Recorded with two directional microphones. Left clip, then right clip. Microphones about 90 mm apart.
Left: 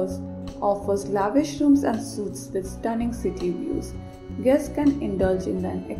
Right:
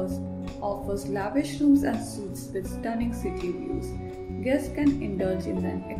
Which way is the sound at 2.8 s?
25° left (ahead or behind).